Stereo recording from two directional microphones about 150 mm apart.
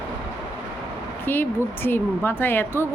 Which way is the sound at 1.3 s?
15° left (ahead or behind).